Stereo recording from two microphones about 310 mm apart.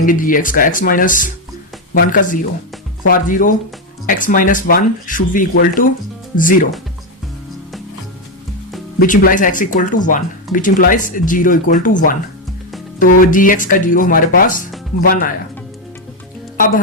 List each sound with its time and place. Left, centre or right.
0.0 s speech: left
9.0 s speech: left
13.1 s speech: left